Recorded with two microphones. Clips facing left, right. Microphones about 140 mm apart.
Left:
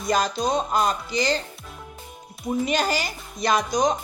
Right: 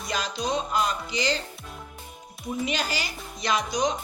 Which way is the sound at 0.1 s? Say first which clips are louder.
Left 6 dB; 45° left (ahead or behind).